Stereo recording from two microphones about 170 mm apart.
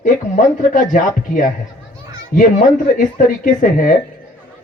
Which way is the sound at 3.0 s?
50° left (ahead or behind).